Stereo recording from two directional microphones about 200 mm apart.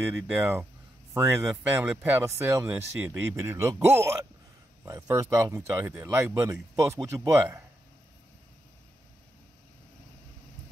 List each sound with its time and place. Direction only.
0.1 s speech: 10° right (ahead or behind)